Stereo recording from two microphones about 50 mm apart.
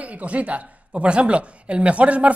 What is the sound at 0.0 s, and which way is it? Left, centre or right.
A woman's voice, right.